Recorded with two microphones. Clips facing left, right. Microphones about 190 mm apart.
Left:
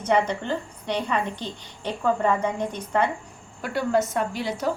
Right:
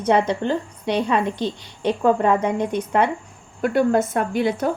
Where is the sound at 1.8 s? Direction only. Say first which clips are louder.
Right 5 dB; 75° right (ahead or behind).